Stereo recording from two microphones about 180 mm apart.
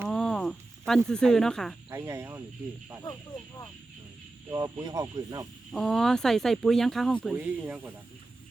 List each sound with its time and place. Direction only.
0.1 s snake: 5° left (ahead or behind)
1.9 s speech: 15° right (ahead or behind)
4.5 s speech: 20° right (ahead or behind)
5.7 s speech: 5° left (ahead or behind)
7.3 s speech: 10° right (ahead or behind)